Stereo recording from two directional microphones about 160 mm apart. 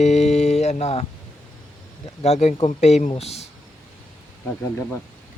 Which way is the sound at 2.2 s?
45° left (ahead or behind).